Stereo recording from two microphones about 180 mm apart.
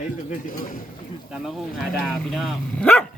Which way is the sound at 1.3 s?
Centre (ahead or behind).